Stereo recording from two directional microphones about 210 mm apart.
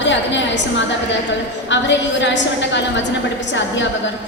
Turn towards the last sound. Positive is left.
turn(degrees=60)  # may be behind; listen again after turning